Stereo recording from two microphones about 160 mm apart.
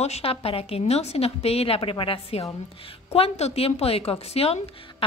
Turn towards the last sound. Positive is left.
turn(degrees=35)  # may be behind; listen again after turning